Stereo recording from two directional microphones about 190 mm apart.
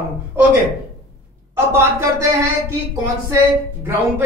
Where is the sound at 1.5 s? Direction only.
15° right (ahead or behind).